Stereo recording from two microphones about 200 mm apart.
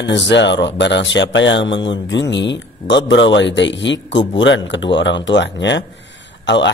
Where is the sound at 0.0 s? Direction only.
60° left (ahead or behind).